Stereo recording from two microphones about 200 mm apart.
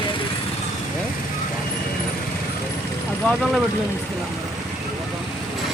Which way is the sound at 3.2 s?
Centre (ahead or behind).